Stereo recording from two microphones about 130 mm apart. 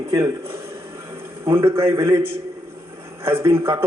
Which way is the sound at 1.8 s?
20° right (ahead or behind).